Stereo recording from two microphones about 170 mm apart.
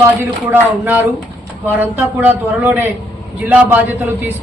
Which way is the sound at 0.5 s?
10° right (ahead or behind).